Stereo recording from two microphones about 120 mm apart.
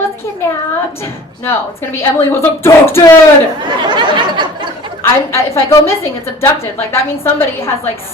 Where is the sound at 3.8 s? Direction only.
40° right (ahead or behind).